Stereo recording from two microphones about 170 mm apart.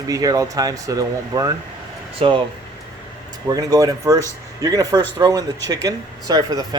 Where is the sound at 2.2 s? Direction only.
30° right (ahead or behind).